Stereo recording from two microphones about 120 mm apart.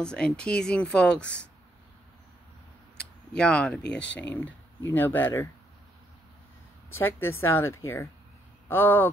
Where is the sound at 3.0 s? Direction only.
5° left (ahead or behind).